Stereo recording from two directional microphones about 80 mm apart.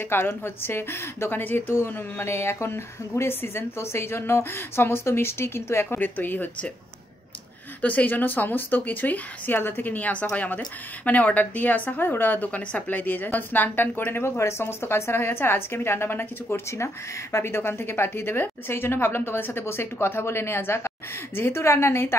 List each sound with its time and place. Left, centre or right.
0.4 s a woman's voice: left
7.8 s a woman's voice: centre